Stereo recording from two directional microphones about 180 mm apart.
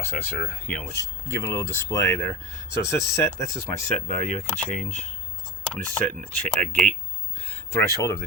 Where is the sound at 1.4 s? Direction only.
15° left (ahead or behind).